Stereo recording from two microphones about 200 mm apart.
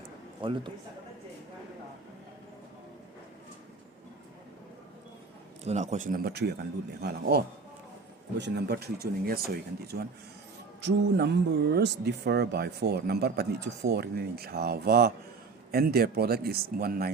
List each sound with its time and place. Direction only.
0.4 s a man's voice: 25° right (ahead or behind)
5.6 s speech: 35° right (ahead or behind)